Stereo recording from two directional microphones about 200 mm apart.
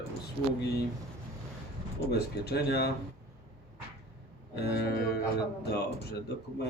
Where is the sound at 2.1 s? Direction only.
55° left (ahead or behind).